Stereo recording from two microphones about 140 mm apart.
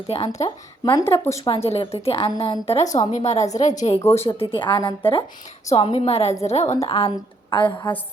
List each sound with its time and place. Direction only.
0.1 s a woman's voice: 45° left (ahead or behind)
0.4 s speech: 25° left (ahead or behind)
1.5 s a woman's voice: 45° left (ahead or behind)
2.8 s speech: 25° left (ahead or behind)
3.1 s a woman's voice: 50° left (ahead or behind)
4.0 s speech: 20° left (ahead or behind)
4.3 s a woman's voice: 40° left (ahead or behind)